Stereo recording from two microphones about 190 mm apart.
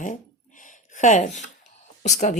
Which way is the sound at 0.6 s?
40° left (ahead or behind).